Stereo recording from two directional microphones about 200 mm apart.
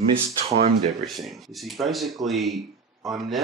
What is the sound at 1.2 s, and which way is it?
Speech, centre (ahead or behind).